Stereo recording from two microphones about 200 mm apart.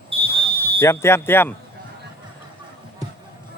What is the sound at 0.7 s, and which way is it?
Speech, 15° left (ahead or behind).